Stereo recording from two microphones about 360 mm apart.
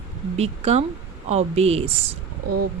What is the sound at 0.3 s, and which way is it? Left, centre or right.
A woman's voice, centre.